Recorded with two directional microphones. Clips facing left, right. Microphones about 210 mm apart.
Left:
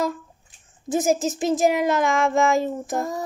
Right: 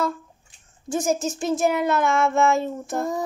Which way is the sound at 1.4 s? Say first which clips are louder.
Left 1 dB; 20° left (ahead or behind).